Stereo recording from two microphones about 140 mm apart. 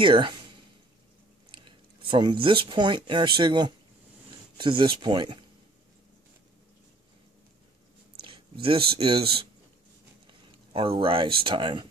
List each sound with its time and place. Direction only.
0.0 s speech: 35° right (ahead or behind)
1.5 s speech: 35° right (ahead or behind)
8.2 s speech: 40° right (ahead or behind)
10.2 s a sound: 40° right (ahead or behind)
11.4 s speech: 35° right (ahead or behind)